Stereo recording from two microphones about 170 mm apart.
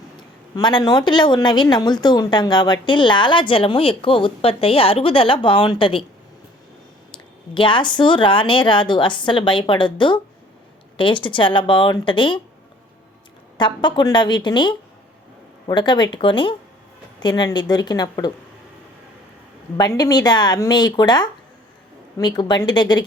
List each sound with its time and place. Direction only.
0.5 s a woman's voice: 25° left (ahead or behind)
7.1 s speech: 30° left (ahead or behind)
13.6 s speech: 25° left (ahead or behind)
19.7 s speech: 25° left (ahead or behind)